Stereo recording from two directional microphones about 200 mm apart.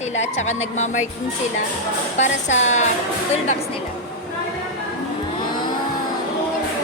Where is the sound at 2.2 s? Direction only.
35° left (ahead or behind).